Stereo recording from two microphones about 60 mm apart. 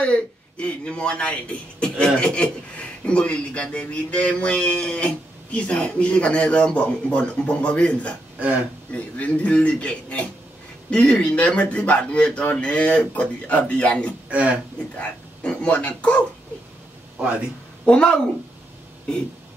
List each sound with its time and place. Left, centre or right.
0.0 s speech: centre
14.3 s speech: right
15.0 s speech: centre
17.8 s speech: centre